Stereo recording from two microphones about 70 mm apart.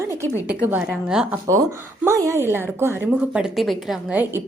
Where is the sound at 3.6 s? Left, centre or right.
Centre.